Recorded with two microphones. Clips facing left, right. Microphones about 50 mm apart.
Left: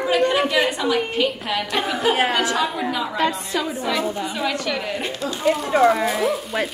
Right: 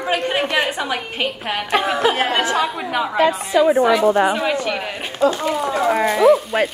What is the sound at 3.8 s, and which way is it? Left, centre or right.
Speech, right.